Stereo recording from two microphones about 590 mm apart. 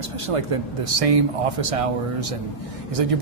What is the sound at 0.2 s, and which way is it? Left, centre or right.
Speech, right.